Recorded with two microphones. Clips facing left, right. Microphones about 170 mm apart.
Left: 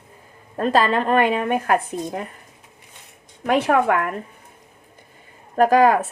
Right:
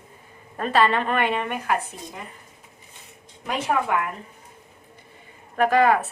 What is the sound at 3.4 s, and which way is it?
Speech, 65° left (ahead or behind).